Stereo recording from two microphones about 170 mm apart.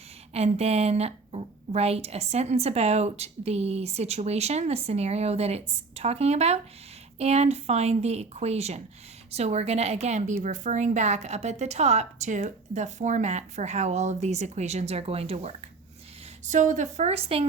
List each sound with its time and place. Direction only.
0.3 s a woman's voice: 40° right (ahead or behind)
16.5 s a woman's voice: 50° right (ahead or behind)